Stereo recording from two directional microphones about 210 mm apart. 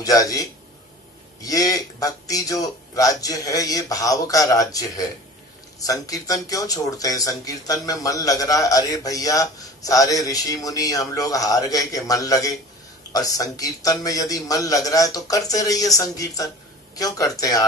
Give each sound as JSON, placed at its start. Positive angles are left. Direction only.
{"t": 0.0, "sound": "speech", "side_deg": 15}